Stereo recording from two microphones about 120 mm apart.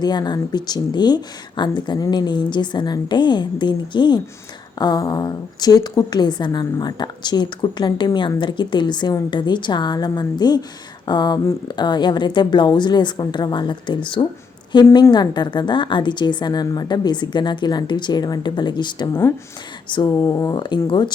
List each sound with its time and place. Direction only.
0.0 s speech: 35° left (ahead or behind)